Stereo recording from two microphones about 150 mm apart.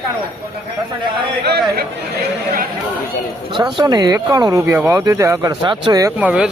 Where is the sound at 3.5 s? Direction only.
30° right (ahead or behind).